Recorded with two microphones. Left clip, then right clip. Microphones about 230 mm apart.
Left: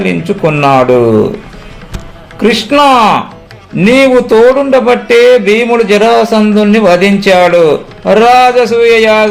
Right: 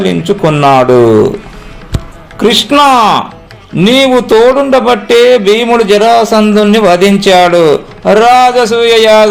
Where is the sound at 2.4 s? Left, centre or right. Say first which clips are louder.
Right 1 dB; right.